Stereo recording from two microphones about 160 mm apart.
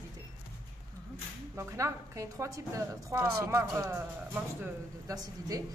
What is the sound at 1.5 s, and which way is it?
A woman's voice, 20° right (ahead or behind).